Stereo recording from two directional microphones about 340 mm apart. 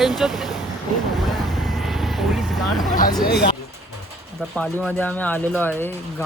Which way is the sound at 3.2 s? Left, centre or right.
Left.